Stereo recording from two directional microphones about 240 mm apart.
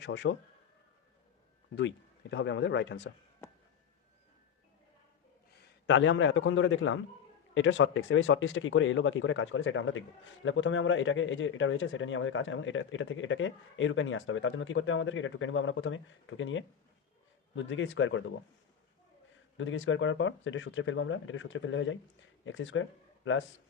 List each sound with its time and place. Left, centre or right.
0.0 s speech: left
2.3 s speech: left
5.8 s speech: left
19.5 s speech: left